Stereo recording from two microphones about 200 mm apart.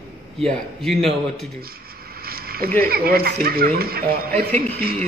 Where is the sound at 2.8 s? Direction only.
50° right (ahead or behind).